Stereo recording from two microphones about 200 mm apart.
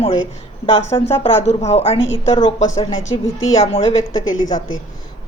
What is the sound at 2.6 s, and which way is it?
Speech, 15° left (ahead or behind).